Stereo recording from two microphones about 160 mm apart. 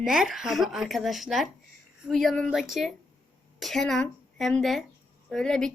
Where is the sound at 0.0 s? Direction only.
5° right (ahead or behind).